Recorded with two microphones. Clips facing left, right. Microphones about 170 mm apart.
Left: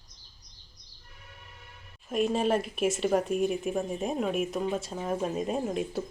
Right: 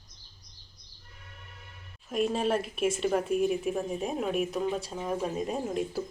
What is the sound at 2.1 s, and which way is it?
Speech, centre (ahead or behind).